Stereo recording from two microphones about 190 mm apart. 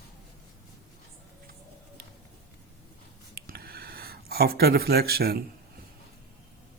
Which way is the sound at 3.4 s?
55° right (ahead or behind).